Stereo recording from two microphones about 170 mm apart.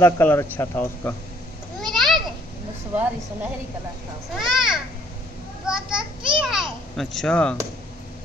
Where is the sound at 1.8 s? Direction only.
Centre (ahead or behind).